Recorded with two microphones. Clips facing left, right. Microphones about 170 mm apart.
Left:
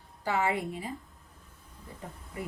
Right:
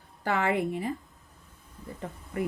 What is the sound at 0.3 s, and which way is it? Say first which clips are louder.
Speech: right 3 dB; 60° right (ahead or behind).